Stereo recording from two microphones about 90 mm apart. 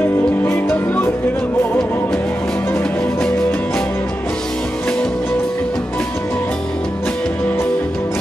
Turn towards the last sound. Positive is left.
turn(degrees=15)  # may be behind; listen again after turning